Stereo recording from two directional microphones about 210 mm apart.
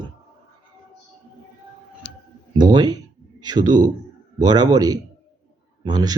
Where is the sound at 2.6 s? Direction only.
20° right (ahead or behind).